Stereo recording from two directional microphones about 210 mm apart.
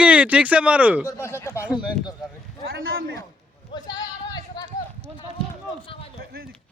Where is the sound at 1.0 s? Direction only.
15° left (ahead or behind).